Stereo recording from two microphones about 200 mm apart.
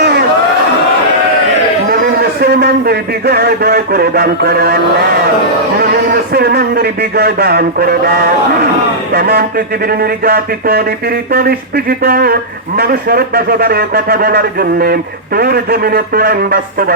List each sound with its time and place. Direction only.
0.0 s a sound: 50° right (ahead or behind)
1.9 s a man's voice: 50° right (ahead or behind)
6.3 s speech: 50° right (ahead or behind)